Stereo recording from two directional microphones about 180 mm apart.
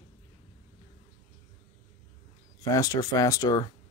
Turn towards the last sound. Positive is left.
turn(degrees=20)  # may be behind; listen again after turning